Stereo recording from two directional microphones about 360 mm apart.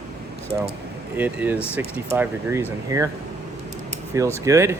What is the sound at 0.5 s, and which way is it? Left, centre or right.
Speech, centre.